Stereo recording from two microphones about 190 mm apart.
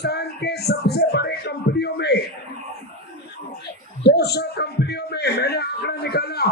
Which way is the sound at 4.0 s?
60° left (ahead or behind).